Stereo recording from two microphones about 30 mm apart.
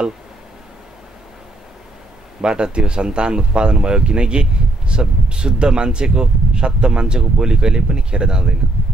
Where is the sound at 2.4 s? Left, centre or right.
Right.